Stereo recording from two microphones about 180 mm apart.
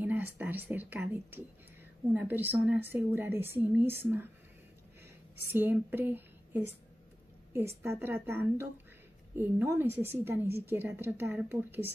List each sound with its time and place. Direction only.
0.0 s a woman's voice: 10° right (ahead or behind)
5.5 s a woman's voice: 10° right (ahead or behind)